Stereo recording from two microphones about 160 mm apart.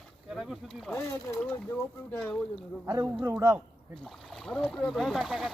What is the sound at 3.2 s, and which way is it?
Speech, 20° right (ahead or behind).